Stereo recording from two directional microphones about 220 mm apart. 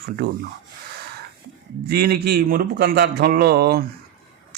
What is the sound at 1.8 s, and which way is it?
Speech, 45° right (ahead or behind).